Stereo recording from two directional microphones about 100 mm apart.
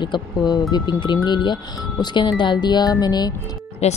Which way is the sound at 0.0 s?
45° left (ahead or behind).